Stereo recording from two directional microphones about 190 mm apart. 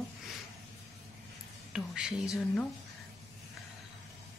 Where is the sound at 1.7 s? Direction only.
5° right (ahead or behind).